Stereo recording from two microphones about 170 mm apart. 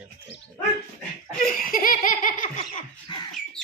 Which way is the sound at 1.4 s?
55° left (ahead or behind).